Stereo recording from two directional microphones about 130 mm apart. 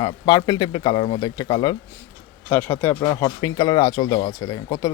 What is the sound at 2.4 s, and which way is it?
Speech, 15° left (ahead or behind).